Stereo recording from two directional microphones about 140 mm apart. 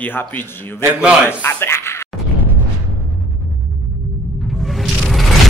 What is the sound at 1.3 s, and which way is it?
Speech, 15° left (ahead or behind).